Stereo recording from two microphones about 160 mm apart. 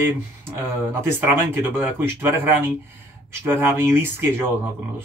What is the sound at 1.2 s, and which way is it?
Speech, 15° right (ahead or behind).